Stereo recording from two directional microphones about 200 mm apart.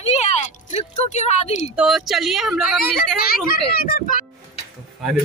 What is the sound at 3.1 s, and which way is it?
Speech, 50° left (ahead or behind).